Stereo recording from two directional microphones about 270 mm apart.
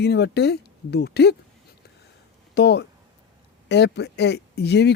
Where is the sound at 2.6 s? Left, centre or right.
Left.